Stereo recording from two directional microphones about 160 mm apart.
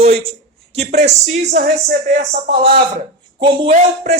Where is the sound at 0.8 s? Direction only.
45° right (ahead or behind).